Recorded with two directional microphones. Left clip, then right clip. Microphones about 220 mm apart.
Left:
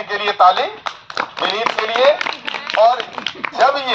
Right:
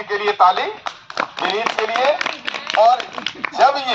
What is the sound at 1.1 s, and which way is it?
Run, 20° left (ahead or behind).